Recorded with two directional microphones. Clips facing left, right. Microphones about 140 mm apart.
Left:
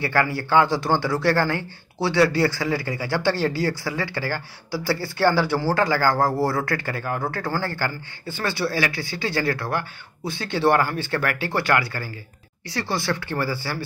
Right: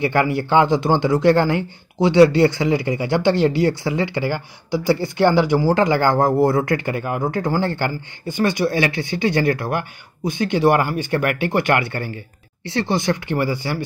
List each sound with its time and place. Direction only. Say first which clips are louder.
0.0 s speech: right 4 dB; 20° right (ahead or behind)